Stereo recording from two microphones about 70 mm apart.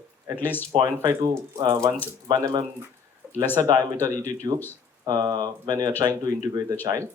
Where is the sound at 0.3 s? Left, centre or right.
Left.